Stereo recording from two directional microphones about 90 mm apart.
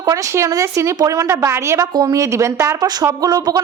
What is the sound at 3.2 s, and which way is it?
Speech, 45° right (ahead or behind).